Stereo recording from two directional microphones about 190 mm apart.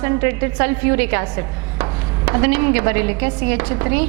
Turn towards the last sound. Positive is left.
turn(degrees=-15)  # may be behind; listen again after turning